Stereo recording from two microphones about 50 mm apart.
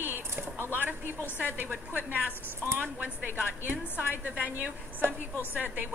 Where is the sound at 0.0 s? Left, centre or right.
Right.